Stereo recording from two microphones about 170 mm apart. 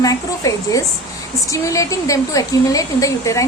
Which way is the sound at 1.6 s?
20° left (ahead or behind).